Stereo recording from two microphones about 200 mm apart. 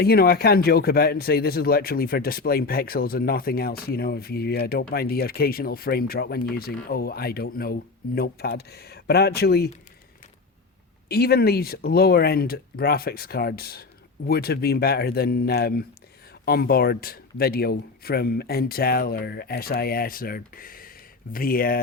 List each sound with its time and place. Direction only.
0.0 s speech: 50° left (ahead or behind)
11.1 s speech: 50° left (ahead or behind)